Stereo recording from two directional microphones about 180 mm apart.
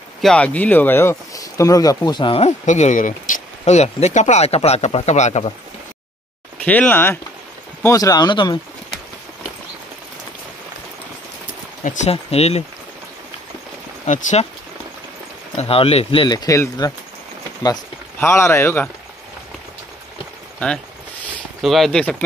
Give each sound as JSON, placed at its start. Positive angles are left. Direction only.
{"t": 0.2, "sound": "speech", "side_deg": 5}
{"t": 6.6, "sound": "speech", "side_deg": 10}
{"t": 11.8, "sound": "speech", "side_deg": 45}
{"t": 14.0, "sound": "speech", "side_deg": 40}
{"t": 15.5, "sound": "speech", "side_deg": 30}
{"t": 18.2, "sound": "speech", "side_deg": 15}
{"t": 20.5, "sound": "speech", "side_deg": 5}